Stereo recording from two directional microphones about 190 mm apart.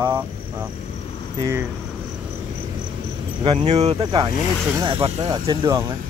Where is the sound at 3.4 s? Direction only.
30° right (ahead or behind).